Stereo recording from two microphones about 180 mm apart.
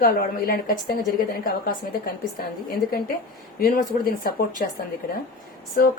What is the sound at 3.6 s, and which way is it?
Speech, 55° left (ahead or behind).